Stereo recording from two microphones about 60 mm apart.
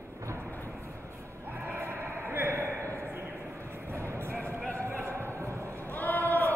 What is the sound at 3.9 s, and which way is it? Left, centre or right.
Music, right.